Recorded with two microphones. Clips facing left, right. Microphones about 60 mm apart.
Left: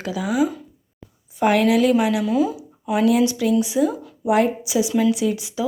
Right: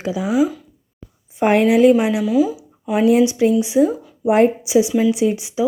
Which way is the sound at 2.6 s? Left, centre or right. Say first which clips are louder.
Right 2 dB; centre.